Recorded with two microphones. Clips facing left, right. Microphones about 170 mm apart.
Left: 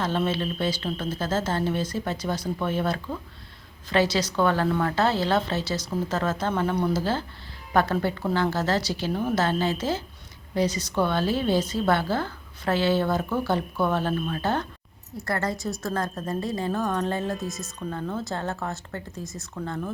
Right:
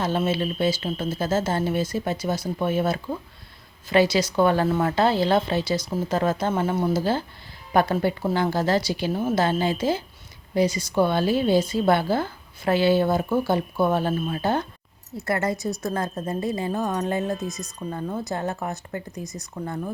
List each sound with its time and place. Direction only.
0.0 s a woman's voice: 10° right (ahead or behind)
17.4 s speech: centre (ahead or behind)
17.8 s a woman's voice: 15° right (ahead or behind)
19.2 s speech: centre (ahead or behind)
19.5 s a woman's voice: 15° right (ahead or behind)